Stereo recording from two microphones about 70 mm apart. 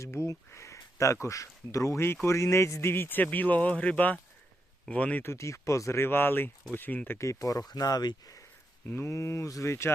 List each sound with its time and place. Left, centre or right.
0.0 s speech: left
2.9 s speech: left
5.2 s speech: left
6.0 s speech: left
7.2 s speech: left
8.9 s speech: left